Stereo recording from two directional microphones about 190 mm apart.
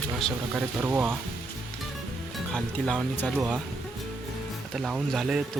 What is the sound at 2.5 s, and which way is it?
Speech, 5° left (ahead or behind).